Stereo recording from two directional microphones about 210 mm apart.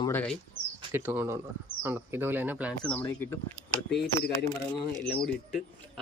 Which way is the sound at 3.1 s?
15° left (ahead or behind).